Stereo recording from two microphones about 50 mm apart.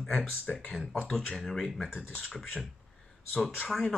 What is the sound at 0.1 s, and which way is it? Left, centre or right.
Speech, left.